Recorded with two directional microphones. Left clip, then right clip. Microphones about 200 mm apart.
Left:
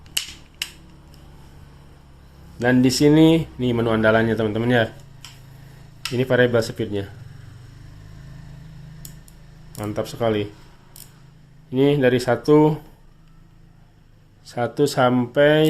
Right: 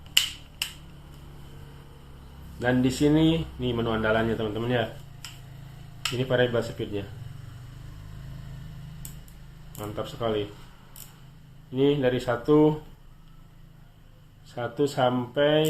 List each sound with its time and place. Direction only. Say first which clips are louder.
2.6 s speech: left 7 dB; 50° left (ahead or behind)
6.1 s speech: left 7 dB; 55° left (ahead or behind)
9.7 s speech: left 7 dB; 55° left (ahead or behind)
11.7 s speech: left 6 dB; 55° left (ahead or behind)
14.4 s speech: left 6 dB; 55° left (ahead or behind)